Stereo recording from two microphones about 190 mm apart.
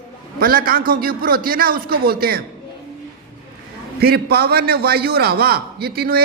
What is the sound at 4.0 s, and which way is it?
A man's voice, 55° right (ahead or behind).